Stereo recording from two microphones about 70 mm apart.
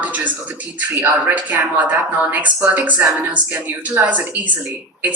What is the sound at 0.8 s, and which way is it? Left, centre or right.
Speech, right.